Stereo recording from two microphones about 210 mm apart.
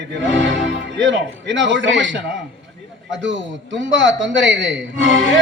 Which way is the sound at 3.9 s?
60° right (ahead or behind).